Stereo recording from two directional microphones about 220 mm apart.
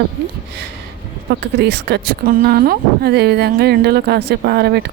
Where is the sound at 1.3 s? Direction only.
50° right (ahead or behind).